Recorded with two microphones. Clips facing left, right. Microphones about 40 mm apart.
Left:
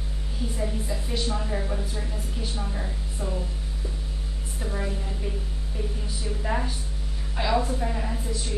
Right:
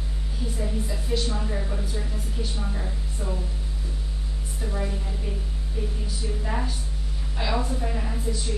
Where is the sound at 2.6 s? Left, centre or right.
Centre.